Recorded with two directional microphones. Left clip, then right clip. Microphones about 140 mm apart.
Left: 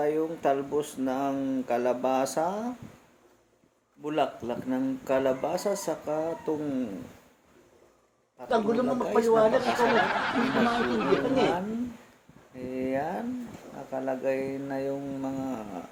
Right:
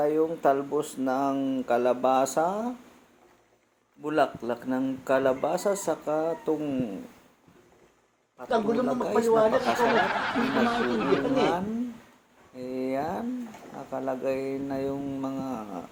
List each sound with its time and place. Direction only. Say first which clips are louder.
0.0 s speech: right 3 dB; 15° right (ahead or behind)
4.0 s speech: right 3 dB; 15° right (ahead or behind)
8.4 s speech: even; centre (ahead or behind)
12.5 s a sound: even; 10° right (ahead or behind)
13.9 s speech: even; 10° right (ahead or behind)